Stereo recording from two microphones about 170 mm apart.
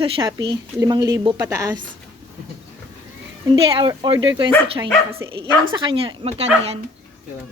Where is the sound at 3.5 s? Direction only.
30° right (ahead or behind).